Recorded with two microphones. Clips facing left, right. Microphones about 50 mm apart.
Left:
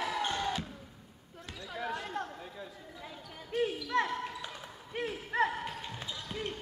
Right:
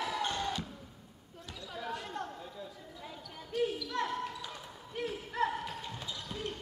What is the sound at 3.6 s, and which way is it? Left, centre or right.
Basketball bounce, left.